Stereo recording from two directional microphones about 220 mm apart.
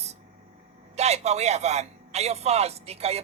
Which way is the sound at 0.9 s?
30° right (ahead or behind).